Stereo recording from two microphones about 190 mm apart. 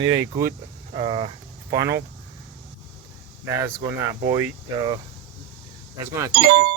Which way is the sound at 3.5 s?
15° right (ahead or behind).